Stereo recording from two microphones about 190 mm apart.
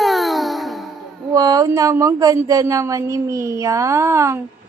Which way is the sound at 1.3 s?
20° right (ahead or behind).